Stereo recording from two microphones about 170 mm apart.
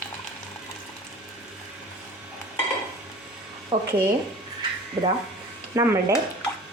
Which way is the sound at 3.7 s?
30° right (ahead or behind).